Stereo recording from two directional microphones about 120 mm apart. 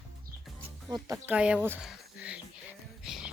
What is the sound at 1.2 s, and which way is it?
Speech, 10° right (ahead or behind).